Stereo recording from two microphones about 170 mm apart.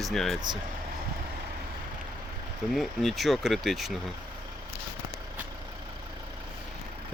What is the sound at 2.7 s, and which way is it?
Speech, centre (ahead or behind).